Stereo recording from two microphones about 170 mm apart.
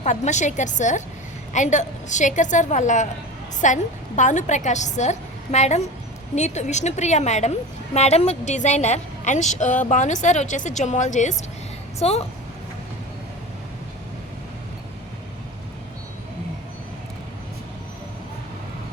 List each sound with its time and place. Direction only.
0.0 s a woman's voice: 45° left (ahead or behind)